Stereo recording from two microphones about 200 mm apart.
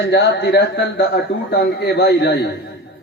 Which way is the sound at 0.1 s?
55° left (ahead or behind).